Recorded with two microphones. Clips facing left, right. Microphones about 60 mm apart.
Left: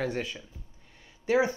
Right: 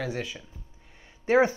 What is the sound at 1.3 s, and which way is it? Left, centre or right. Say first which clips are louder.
Speech: right 4 dB; right.